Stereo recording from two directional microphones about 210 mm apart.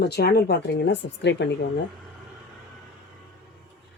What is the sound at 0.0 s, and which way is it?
Speech, 50° left (ahead or behind).